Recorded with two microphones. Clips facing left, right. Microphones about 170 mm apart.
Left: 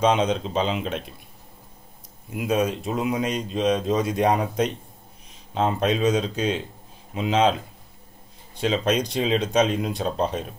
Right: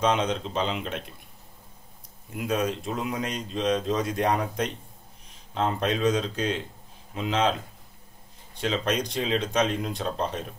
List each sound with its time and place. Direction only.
0.0 s speech: 20° left (ahead or behind)
2.3 s speech: 20° left (ahead or behind)
8.5 s speech: 20° left (ahead or behind)